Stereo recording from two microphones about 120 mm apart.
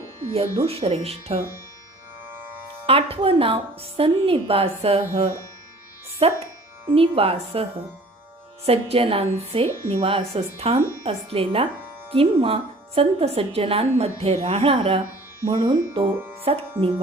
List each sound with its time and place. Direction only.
0.3 s speech: 55° right (ahead or behind)
2.8 s a woman's voice: 50° right (ahead or behind)
8.6 s a woman's voice: 55° right (ahead or behind)